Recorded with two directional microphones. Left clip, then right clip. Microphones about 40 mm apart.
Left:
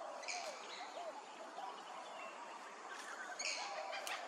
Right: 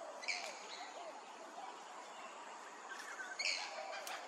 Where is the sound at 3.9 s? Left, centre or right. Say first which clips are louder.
Left 2 dB; centre.